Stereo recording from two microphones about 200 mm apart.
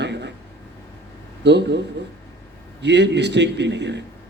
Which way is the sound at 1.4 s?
60° right (ahead or behind).